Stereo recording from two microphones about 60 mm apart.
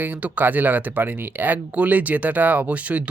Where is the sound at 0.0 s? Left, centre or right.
Right.